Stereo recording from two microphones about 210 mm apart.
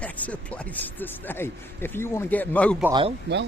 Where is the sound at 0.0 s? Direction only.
5° left (ahead or behind).